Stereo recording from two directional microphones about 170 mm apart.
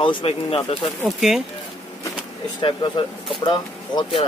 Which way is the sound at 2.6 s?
30° left (ahead or behind).